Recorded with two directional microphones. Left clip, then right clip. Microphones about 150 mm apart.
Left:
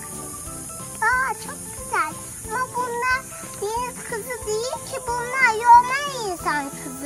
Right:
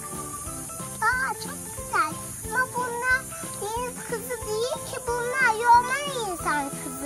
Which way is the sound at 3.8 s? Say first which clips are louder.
Left 3 dB; 25° right (ahead or behind).